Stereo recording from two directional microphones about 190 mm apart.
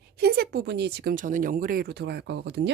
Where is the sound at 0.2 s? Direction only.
55° right (ahead or behind).